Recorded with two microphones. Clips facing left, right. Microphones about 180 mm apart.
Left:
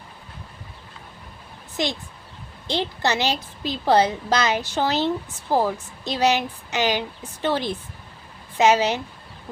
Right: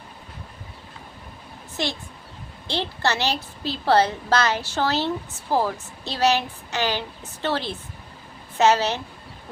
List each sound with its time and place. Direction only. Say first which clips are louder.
1.7 s a woman's voice: left 2 dB; 15° left (ahead or behind)